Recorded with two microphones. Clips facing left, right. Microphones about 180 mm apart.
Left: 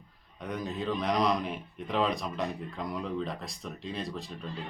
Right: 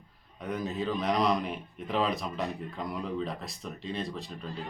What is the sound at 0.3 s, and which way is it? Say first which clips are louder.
Speech: right 2 dB; centre (ahead or behind).